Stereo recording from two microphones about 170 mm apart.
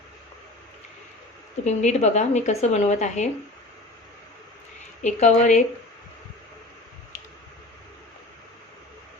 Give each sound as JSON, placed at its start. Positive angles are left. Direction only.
{"t": 1.6, "sound": "a woman's voice", "side_deg": 40}
{"t": 5.0, "sound": "a woman's voice", "side_deg": 45}